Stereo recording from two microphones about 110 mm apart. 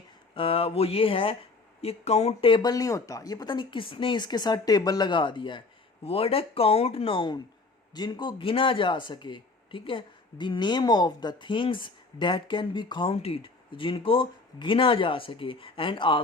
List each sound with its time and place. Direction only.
0.3 s speech: 55° left (ahead or behind)
1.8 s speech: 70° left (ahead or behind)
2.5 s speech: 40° left (ahead or behind)